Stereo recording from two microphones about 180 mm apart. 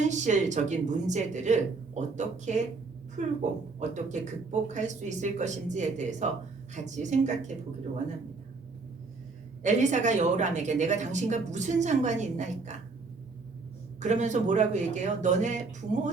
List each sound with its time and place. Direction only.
0.0 s a woman's voice: 40° right (ahead or behind)
9.6 s a woman's voice: 40° right (ahead or behind)
14.0 s a woman's voice: 40° right (ahead or behind)